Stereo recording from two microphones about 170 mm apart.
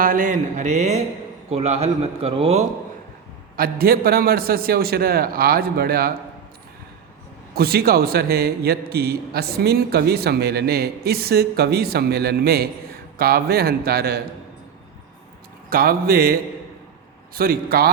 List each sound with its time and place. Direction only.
0.0 s a man's voice: 55° right (ahead or behind); by 2.6 s 35° right (ahead or behind)
3.6 s a man's voice: 60° right (ahead or behind)
7.5 s a man's voice: 65° right (ahead or behind)
15.7 s a man's voice: 60° right (ahead or behind)